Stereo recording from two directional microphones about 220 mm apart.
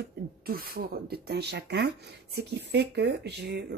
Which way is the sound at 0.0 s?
45° right (ahead or behind).